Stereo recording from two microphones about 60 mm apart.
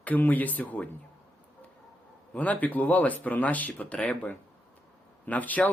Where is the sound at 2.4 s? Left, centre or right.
Left.